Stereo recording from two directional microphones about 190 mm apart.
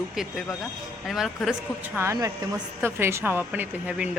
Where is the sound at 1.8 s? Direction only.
10° right (ahead or behind).